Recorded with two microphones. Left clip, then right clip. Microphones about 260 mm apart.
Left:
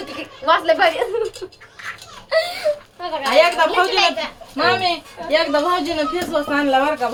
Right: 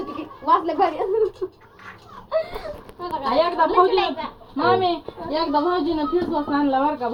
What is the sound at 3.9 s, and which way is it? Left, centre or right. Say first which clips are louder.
Speech: left 4 dB; left.